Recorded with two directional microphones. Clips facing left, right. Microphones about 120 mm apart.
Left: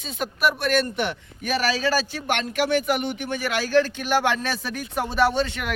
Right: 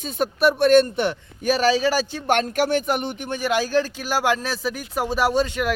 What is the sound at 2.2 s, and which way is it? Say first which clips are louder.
Speech: right 4 dB; 40° right (ahead or behind).